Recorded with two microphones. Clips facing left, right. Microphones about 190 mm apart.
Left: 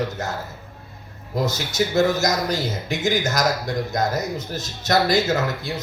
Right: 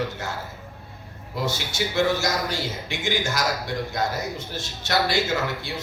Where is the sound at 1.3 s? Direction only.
40° left (ahead or behind).